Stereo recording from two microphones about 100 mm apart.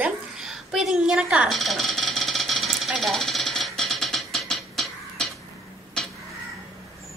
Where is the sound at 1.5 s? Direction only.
Centre (ahead or behind).